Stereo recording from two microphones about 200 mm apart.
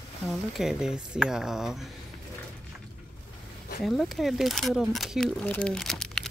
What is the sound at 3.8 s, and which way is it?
Speech, centre (ahead or behind).